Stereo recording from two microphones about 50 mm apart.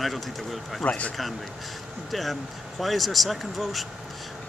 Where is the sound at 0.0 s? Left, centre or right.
Centre.